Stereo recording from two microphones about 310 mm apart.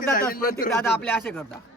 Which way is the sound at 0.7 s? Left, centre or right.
Centre.